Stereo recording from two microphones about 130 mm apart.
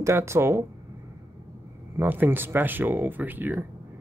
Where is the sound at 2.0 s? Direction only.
15° right (ahead or behind).